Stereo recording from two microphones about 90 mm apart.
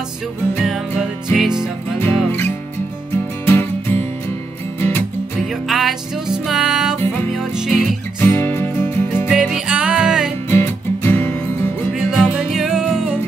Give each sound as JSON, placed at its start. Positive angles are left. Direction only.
{"t": 0.6, "sound": "music", "side_deg": 0}
{"t": 3.4, "sound": "music", "side_deg": 25}
{"t": 5.7, "sound": "music", "side_deg": 0}
{"t": 8.2, "sound": "music", "side_deg": 25}
{"t": 9.3, "sound": "music", "side_deg": -5}
{"t": 10.5, "sound": "music", "side_deg": 25}
{"t": 11.9, "sound": "music", "side_deg": -5}